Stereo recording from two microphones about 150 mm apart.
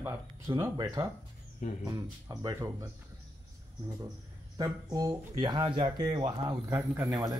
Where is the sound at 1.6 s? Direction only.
55° left (ahead or behind).